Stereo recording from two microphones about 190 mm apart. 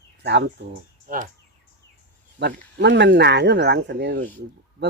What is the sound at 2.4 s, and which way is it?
Speech, 65° right (ahead or behind).